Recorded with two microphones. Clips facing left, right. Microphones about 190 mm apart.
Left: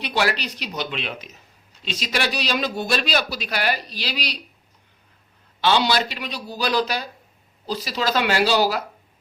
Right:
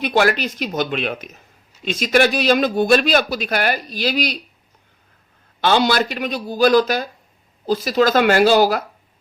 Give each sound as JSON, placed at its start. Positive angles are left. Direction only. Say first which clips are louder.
{"t": 0.0, "sound": "a man's voice", "louder": "right 6 dB", "side_deg": -50}
{"t": 5.5, "sound": "a man's voice", "louder": "right 3 dB", "side_deg": -50}